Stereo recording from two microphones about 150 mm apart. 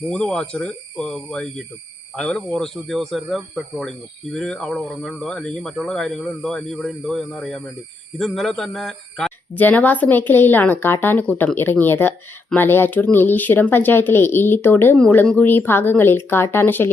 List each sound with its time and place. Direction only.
0.1 s speech: 5° left (ahead or behind)